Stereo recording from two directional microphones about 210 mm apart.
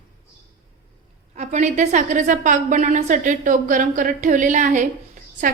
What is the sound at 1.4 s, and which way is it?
A woman's voice, 35° right (ahead or behind).